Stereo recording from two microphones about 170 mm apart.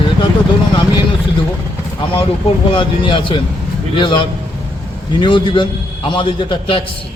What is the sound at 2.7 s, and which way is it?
A man's voice, 30° left (ahead or behind).